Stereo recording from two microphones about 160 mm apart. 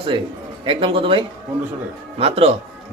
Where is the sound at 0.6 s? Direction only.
35° right (ahead or behind).